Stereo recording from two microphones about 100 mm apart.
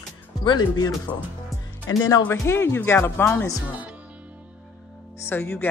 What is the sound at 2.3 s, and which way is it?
Speech, 25° left (ahead or behind).